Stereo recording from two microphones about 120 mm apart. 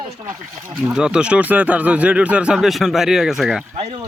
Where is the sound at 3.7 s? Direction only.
55° right (ahead or behind).